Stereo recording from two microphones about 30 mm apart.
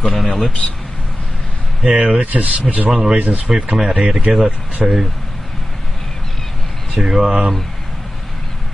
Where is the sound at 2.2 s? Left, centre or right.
Right.